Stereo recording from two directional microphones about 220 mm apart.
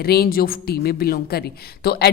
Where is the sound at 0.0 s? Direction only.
45° left (ahead or behind).